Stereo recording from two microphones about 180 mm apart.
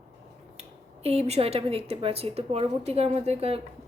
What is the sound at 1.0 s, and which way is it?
A woman's voice, 35° right (ahead or behind).